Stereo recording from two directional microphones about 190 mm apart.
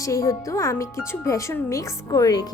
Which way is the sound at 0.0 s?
15° left (ahead or behind).